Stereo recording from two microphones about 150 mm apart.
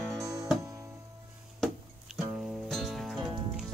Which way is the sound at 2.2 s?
Centre (ahead or behind).